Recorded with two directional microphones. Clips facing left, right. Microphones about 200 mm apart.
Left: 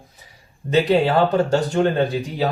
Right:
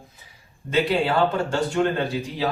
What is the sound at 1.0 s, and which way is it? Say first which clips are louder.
Speech: left 4 dB; 35° left (ahead or behind).